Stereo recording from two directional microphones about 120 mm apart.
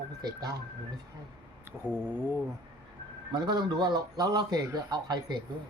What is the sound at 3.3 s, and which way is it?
A man's voice, 35° right (ahead or behind).